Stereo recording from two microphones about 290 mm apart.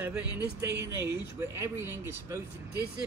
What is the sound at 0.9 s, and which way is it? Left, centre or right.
Speech, centre.